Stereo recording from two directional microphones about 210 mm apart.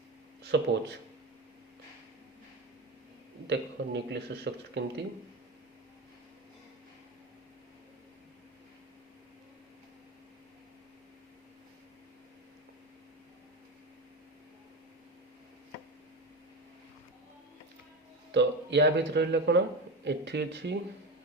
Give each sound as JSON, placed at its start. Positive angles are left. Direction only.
{"t": 0.4, "sound": "speech", "side_deg": -55}
{"t": 3.4, "sound": "speech", "side_deg": -55}
{"t": 18.3, "sound": "speech", "side_deg": -55}